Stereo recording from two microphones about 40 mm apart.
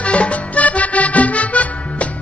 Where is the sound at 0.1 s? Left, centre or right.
Left.